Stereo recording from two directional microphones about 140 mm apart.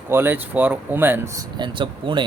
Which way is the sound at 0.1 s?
15° right (ahead or behind).